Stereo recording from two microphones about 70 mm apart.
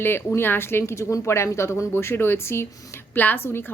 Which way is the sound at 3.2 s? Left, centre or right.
Left.